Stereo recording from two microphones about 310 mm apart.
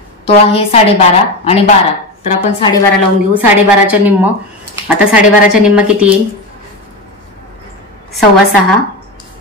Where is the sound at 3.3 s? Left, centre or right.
Centre.